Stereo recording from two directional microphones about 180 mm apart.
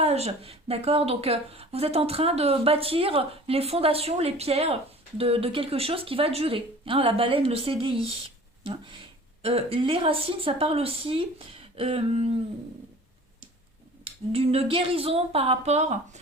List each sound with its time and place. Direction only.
0.0 s a woman's voice: 35° right (ahead or behind)
14.0 s a woman's voice: 35° right (ahead or behind)